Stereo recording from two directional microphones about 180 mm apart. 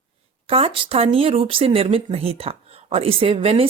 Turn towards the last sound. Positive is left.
turn(degrees=-35)  # may be behind; listen again after turning